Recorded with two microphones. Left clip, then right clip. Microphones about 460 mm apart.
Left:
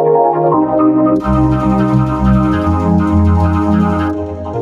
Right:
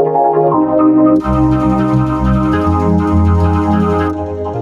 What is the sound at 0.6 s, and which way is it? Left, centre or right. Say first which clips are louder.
Music: right 1 dB; centre.